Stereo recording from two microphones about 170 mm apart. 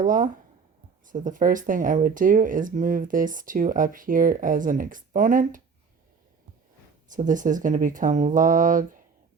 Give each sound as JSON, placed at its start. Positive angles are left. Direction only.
{"t": 0.0, "sound": "speech", "side_deg": -50}
{"t": 7.1, "sound": "speech", "side_deg": -50}